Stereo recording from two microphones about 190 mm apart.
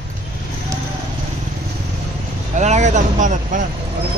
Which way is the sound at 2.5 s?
40° right (ahead or behind).